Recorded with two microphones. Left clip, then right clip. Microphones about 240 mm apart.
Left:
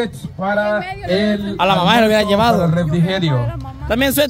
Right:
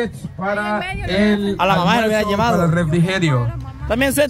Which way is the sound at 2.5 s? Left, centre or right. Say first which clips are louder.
Even; right.